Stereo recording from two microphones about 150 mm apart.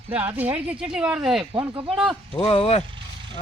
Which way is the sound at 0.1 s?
10° right (ahead or behind).